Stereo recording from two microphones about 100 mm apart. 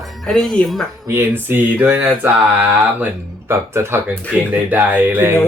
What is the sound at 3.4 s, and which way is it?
Speech, 25° right (ahead or behind).